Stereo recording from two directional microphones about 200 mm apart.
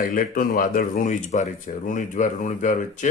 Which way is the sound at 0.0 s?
45° left (ahead or behind).